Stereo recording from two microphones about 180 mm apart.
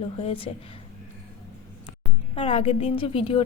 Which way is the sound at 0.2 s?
30° left (ahead or behind).